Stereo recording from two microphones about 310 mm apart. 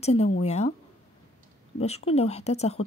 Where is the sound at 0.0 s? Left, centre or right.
Centre.